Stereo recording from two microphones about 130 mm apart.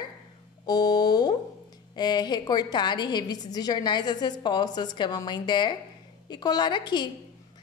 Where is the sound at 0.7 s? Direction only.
30° left (ahead or behind).